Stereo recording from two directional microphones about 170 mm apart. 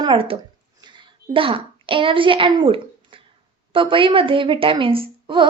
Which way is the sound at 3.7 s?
30° right (ahead or behind).